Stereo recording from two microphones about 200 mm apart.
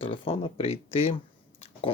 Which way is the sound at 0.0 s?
25° left (ahead or behind).